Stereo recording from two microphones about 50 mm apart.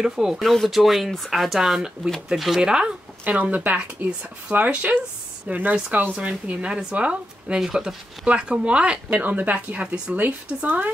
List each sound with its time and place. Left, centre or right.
0.0 s speech: centre
0.4 s speech: centre
2.6 s speech: centre
3.5 s speech: right
7.6 s speech: centre
8.3 s speech: right